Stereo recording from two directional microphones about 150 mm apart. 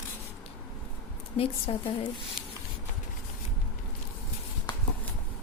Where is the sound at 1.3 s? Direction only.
40° left (ahead or behind).